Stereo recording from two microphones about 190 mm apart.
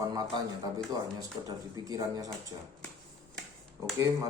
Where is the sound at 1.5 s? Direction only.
20° right (ahead or behind).